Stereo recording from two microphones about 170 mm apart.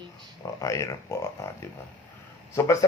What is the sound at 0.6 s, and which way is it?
A man's voice, 20° left (ahead or behind).